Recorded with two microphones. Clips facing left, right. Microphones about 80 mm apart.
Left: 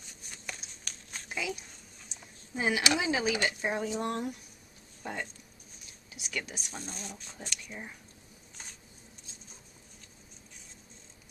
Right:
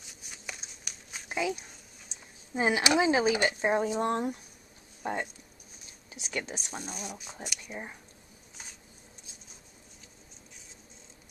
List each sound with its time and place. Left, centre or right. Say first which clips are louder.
0.0 s a sound: even; centre
1.3 s speech: right 5 dB; right
6.7 s speech: right 3 dB; centre